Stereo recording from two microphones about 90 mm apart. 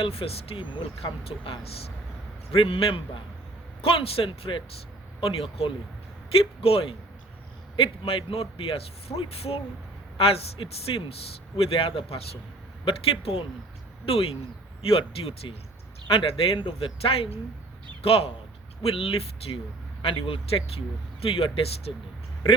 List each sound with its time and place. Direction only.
0.0 s speech: 90° left; by 0.9 s 65° left (ahead or behind)
1.2 s a man's voice: 90° left
5.2 s a man's voice: 90° left
16.1 s a man's voice: 75° left (ahead or behind); by 21.9 s 90° left